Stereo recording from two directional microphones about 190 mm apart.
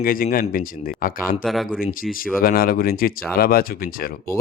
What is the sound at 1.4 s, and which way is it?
Speech, centre (ahead or behind).